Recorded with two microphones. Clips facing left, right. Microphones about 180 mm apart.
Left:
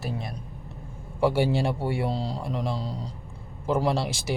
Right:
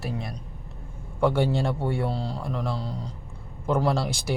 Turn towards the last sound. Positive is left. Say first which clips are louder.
# right 1 dB
turn(degrees=5)  # may be behind; listen again after turning